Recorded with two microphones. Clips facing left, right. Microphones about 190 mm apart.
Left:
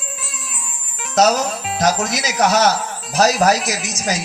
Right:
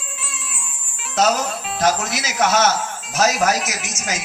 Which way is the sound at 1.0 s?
40° left (ahead or behind).